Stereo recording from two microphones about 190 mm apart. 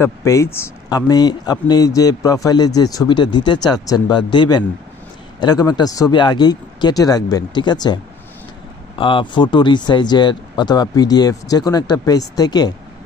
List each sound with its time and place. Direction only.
0.0 s speech: 15° left (ahead or behind)